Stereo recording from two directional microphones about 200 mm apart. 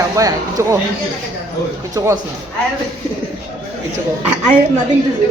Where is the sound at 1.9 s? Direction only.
15° right (ahead or behind).